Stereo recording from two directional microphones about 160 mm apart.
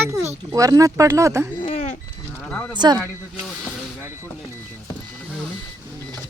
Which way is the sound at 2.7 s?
25° right (ahead or behind).